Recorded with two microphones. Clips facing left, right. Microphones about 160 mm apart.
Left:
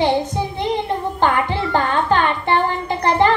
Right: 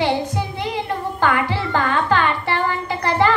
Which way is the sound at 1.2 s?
20° left (ahead or behind).